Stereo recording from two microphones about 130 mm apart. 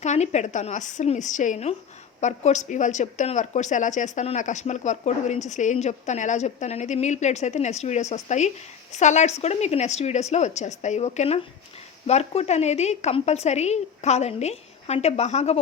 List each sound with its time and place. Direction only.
0.0 s a woman's voice: 60° left (ahead or behind)